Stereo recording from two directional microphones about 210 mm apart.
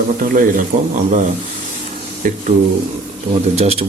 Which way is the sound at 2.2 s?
40° right (ahead or behind).